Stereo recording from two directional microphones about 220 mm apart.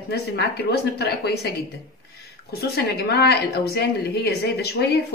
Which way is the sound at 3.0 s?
50° left (ahead or behind).